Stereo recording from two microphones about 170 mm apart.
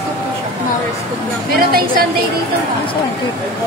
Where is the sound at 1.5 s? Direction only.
60° right (ahead or behind).